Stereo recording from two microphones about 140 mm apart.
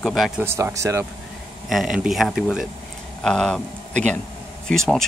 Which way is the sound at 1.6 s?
5° right (ahead or behind).